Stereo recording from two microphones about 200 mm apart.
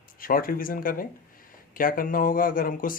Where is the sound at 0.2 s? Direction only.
45° left (ahead or behind).